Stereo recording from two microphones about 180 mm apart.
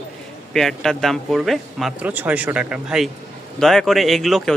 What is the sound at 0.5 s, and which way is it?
A man's voice, centre (ahead or behind).